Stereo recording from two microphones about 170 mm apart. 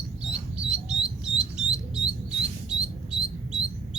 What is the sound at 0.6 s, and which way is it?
Bird, 5° right (ahead or behind).